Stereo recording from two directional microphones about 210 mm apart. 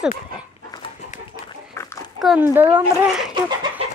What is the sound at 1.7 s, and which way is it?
Dog, 15° left (ahead or behind).